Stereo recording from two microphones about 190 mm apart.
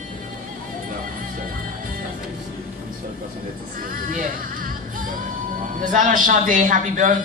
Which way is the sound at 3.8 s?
45° right (ahead or behind).